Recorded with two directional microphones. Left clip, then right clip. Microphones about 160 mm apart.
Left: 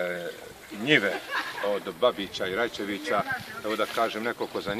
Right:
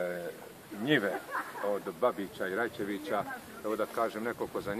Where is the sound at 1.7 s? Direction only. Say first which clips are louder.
Left 5 dB; 50° left (ahead or behind).